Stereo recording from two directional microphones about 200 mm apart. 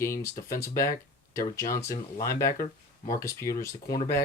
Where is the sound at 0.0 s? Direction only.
15° left (ahead or behind).